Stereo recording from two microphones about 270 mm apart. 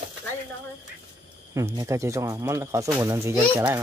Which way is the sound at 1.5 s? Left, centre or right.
Centre.